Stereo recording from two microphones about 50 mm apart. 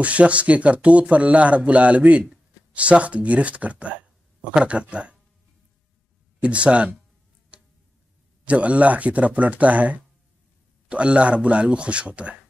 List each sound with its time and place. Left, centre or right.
0.0 s speech: right
6.4 s speech: right
7.5 s tick-tock: right
8.5 s speech: right